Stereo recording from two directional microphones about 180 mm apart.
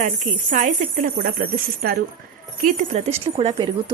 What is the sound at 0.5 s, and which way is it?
A woman's voice, 45° right (ahead or behind).